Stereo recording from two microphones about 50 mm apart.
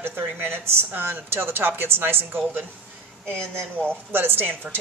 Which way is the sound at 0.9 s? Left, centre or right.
Right.